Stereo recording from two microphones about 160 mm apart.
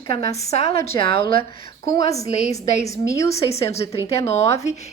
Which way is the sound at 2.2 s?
45° left (ahead or behind).